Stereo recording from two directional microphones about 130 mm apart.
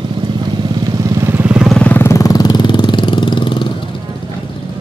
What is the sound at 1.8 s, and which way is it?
Vehicle, 15° left (ahead or behind).